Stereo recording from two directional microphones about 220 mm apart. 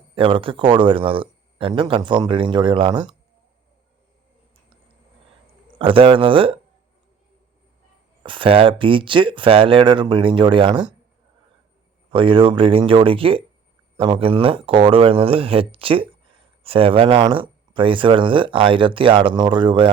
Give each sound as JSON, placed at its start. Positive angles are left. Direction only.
{"t": 0.1, "sound": "speech", "side_deg": -25}
{"t": 5.8, "sound": "speech", "side_deg": -25}
{"t": 8.2, "sound": "speech", "side_deg": -20}
{"t": 12.1, "sound": "speech", "side_deg": -25}